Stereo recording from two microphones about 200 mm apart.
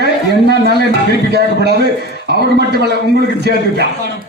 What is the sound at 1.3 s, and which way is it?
Speech, 55° right (ahead or behind).